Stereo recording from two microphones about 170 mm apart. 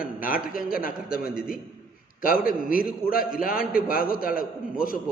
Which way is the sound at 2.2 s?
55° left (ahead or behind).